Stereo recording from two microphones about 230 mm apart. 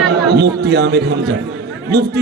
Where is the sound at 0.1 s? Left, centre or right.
Right.